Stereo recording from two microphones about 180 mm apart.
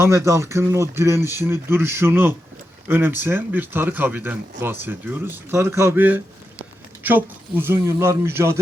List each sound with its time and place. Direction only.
0.0 s speech: 15° right (ahead or behind)